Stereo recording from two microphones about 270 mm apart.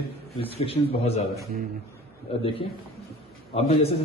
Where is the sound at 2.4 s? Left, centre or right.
Centre.